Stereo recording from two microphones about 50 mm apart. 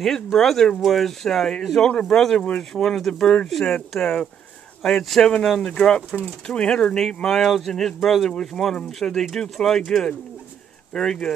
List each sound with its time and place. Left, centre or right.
0.0 s speech: centre
2.1 s speech: centre
2.4 s speech: left
2.8 s speech: centre
5.6 s speech: centre